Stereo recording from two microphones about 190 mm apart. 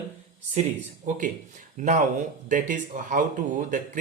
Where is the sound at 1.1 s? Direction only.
45° right (ahead or behind).